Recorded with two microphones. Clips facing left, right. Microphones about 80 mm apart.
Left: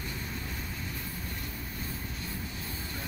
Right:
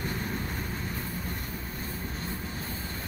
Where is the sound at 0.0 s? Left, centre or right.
Right.